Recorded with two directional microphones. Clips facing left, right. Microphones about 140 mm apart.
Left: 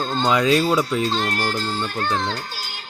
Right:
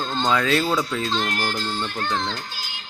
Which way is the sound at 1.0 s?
40° left (ahead or behind).